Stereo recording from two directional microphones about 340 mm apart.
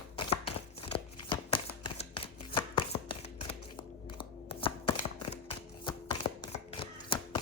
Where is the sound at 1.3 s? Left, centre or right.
Centre.